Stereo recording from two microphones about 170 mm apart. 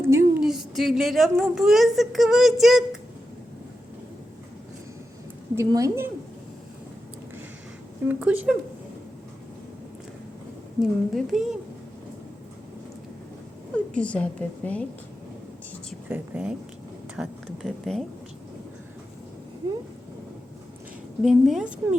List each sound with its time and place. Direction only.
0.0 s a sound: 15° right (ahead or behind)
0.3 s a woman's voice: 5° right (ahead or behind)
5.5 s speech: 20° right (ahead or behind)
8.0 s speech: 10° right (ahead or behind)
10.8 s a woman's voice: centre (ahead or behind)
13.7 s a woman's voice: 5° left (ahead or behind)
16.0 s a woman's voice: 10° right (ahead or behind)
21.2 s a woman's voice: centre (ahead or behind)